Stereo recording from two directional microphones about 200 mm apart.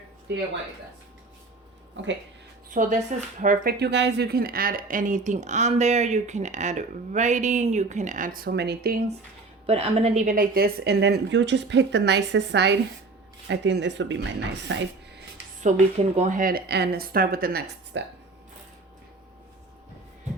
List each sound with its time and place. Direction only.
2.0 s a woman's voice: 60° right (ahead or behind)
2.6 s speech: 40° right (ahead or behind)
9.6 s a woman's voice: 30° right (ahead or behind); by 15.2 s 60° right (ahead or behind)
15.7 s speech: 35° right (ahead or behind); by 18.0 s 55° right (ahead or behind)